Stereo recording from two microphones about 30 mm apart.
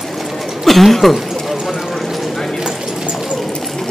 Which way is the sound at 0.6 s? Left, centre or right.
Centre.